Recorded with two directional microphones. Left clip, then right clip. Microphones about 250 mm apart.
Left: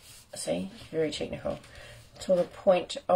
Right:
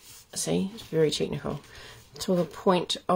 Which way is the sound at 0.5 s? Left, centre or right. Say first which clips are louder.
Right 2 dB; right.